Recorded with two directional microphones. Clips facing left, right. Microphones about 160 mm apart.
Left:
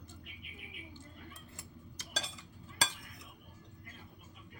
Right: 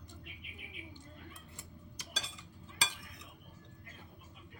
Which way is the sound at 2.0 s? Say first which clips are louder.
Right 1 dB; 15° right (ahead or behind).